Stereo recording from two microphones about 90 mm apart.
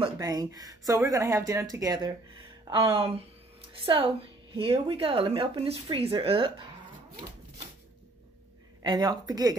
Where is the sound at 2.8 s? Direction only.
80° right.